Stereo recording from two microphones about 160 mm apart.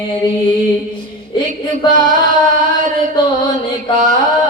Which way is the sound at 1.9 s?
55° right (ahead or behind).